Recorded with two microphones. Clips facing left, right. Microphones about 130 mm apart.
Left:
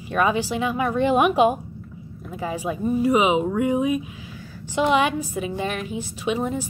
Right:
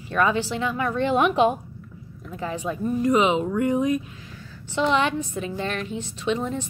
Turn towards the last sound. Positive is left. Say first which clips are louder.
# left 1 dB
turn(degrees=10)  # may be behind; listen again after turning